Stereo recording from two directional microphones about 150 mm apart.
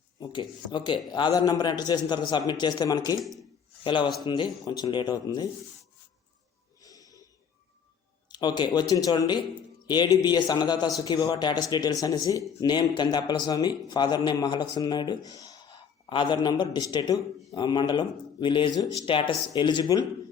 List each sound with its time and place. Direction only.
0.2 s a man's voice: 30° left (ahead or behind)
3.2 s speech: centre (ahead or behind)
3.8 s a man's voice: 30° left (ahead or behind)
6.8 s snort: 25° left (ahead or behind)
8.3 s a man's voice: 30° left (ahead or behind)